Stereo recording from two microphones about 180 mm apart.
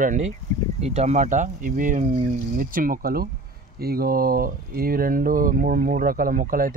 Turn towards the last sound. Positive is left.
turn(degrees=-50)  # may be behind; listen again after turning